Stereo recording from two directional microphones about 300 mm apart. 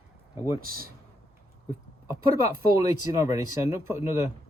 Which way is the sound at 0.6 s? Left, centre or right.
Right.